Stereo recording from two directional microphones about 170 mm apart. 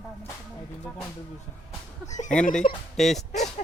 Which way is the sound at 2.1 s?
45° left (ahead or behind).